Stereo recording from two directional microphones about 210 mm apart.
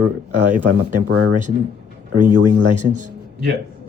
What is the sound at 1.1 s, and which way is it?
Speech, 55° right (ahead or behind).